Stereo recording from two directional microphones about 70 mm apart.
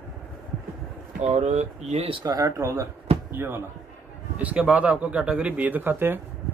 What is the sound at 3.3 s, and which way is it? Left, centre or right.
Speech, right.